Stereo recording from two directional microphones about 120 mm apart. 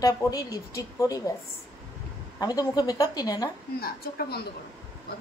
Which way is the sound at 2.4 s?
35° left (ahead or behind).